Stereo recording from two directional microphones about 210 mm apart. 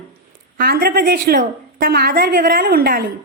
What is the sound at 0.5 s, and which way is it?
A woman's voice, 45° right (ahead or behind).